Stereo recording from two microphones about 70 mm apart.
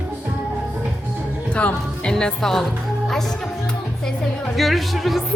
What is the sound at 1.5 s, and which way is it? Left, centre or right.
A woman's voice, centre.